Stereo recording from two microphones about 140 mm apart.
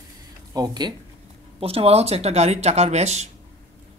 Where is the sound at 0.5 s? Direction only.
30° right (ahead or behind).